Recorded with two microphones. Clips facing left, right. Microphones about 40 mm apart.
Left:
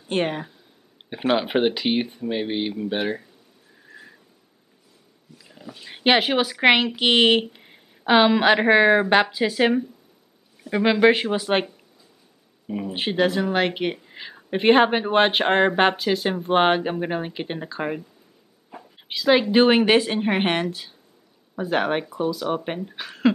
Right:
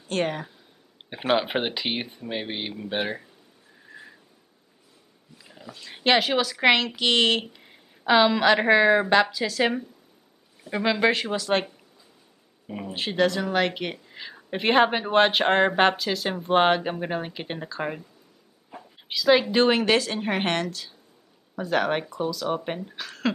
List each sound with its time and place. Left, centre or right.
0.1 s a woman's voice: centre
1.1 s speech: centre
3.8 s a sound: centre
5.4 s a sound: centre
5.7 s a woman's voice: centre
12.6 s speech: centre
12.9 s speech: centre
18.7 s a sound: centre
19.5 s a woman's voice: centre